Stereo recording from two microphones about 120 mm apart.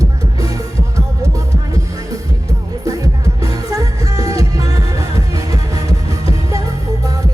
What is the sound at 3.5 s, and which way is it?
Music, 30° right (ahead or behind).